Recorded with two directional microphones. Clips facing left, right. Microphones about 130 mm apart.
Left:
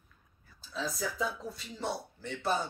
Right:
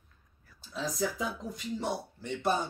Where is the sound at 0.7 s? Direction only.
15° right (ahead or behind).